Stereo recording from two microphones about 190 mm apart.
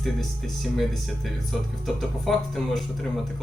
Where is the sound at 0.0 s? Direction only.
Centre (ahead or behind).